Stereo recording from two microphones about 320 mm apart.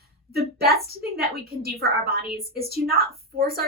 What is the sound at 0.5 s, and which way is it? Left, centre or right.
A woman's voice, right.